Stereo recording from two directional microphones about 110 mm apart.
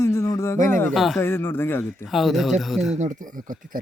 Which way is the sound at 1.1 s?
20° left (ahead or behind).